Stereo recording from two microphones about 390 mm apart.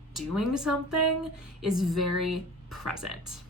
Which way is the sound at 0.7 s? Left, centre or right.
Right.